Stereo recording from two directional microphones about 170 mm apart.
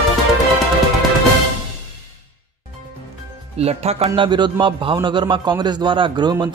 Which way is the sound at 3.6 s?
40° right (ahead or behind).